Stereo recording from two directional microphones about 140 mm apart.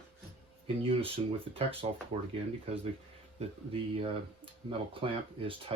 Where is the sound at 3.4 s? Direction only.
50° right (ahead or behind).